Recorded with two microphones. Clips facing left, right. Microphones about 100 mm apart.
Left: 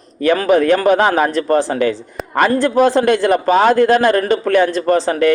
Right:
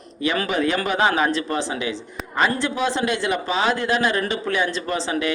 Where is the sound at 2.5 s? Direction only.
45° left (ahead or behind).